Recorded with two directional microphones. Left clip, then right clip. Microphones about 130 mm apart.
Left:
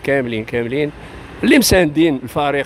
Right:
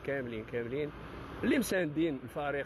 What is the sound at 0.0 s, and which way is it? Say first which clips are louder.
Speech: left 19 dB; 55° left (ahead or behind).